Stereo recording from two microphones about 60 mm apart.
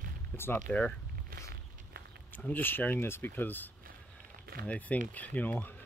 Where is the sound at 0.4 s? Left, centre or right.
Left.